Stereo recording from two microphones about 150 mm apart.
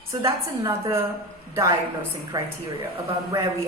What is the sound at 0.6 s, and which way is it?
Speech, 20° right (ahead or behind).